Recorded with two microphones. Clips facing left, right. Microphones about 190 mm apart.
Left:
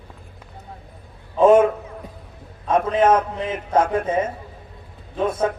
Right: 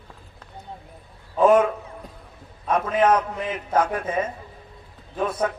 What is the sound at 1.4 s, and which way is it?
Speech, 25° left (ahead or behind).